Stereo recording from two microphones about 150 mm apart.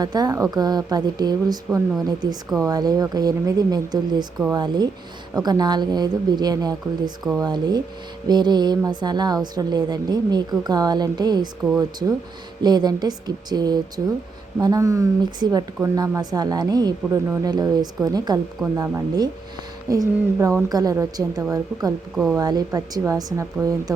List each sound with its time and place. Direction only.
0.0 s a woman's voice: 25° right (ahead or behind)
22.1 s speech: centre (ahead or behind)
22.4 s a woman's voice: 25° right (ahead or behind)